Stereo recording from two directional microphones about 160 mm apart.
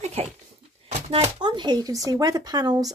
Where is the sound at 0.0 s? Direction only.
40° right (ahead or behind); by 2.0 s 25° right (ahead or behind).